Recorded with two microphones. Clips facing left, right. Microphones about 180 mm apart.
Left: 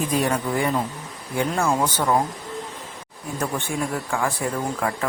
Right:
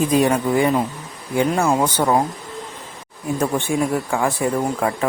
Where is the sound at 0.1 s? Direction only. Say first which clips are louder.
Right 6 dB; 20° right (ahead or behind).